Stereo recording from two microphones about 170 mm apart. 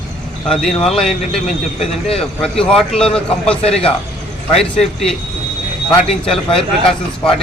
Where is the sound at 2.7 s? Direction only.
5° left (ahead or behind).